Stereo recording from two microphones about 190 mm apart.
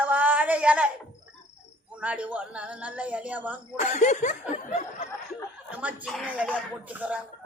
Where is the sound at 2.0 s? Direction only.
5° right (ahead or behind).